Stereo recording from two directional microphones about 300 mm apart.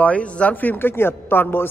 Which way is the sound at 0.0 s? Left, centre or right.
Centre.